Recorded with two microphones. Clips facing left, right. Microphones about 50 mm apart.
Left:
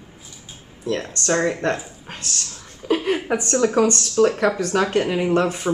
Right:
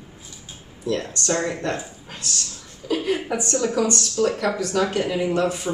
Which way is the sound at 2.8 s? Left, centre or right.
Left.